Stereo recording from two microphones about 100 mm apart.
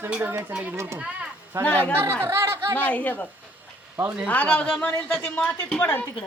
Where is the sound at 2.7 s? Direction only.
15° left (ahead or behind).